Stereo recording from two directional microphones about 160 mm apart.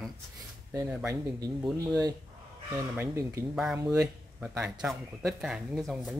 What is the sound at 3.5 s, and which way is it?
Speech, 5° right (ahead or behind).